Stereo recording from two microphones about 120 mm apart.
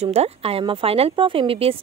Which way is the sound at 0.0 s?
60° right (ahead or behind).